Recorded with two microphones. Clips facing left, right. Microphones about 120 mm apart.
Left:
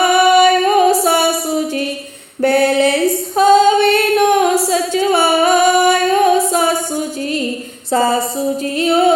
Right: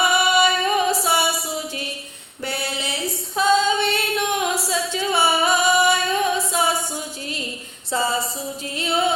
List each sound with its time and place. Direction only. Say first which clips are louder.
0.0 s music: left 8 dB; 50° left (ahead or behind)
2.4 s female singing: left 16 dB; 55° left (ahead or behind)